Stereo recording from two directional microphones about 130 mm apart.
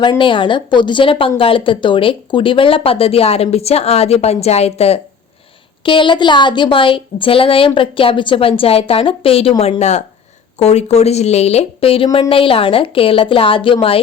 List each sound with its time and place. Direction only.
0.0 s a woman's voice: 40° left (ahead or behind)
5.8 s a woman's voice: 40° left (ahead or behind)